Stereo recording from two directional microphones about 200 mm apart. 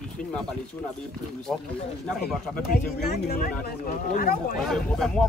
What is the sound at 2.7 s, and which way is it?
Speech, 50° left (ahead or behind).